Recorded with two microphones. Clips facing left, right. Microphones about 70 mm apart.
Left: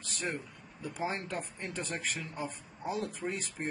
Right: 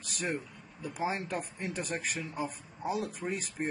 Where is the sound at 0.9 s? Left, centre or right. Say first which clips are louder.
Right 2 dB; centre.